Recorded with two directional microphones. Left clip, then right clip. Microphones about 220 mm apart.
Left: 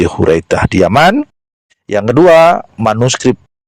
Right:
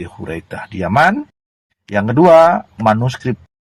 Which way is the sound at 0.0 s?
50° left (ahead or behind).